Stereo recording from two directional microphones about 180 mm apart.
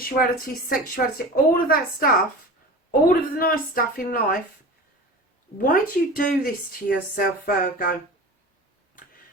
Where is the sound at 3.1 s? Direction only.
55° left (ahead or behind).